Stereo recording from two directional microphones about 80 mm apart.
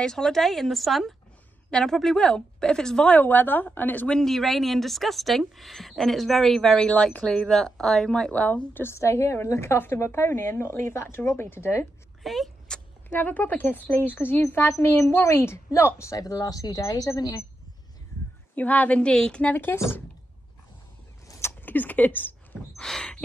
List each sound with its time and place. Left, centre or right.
0.0 s a woman's voice: centre
3.2 s a woman's voice: left
4.1 s speech: centre
8.3 s a woman's voice: centre
8.9 s a woman's voice: left
12.2 s a sound: centre
13.1 s a woman's voice: left
16.2 s speech: left
18.5 s a woman's voice: left
19.4 s a woman's voice: left
21.3 s a sound: left
22.8 s a woman's voice: centre